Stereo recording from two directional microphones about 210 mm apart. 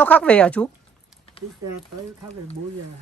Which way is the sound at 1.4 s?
30° left (ahead or behind).